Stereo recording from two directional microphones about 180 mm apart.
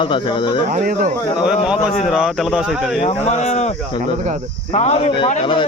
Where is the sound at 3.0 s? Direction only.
40° left (ahead or behind).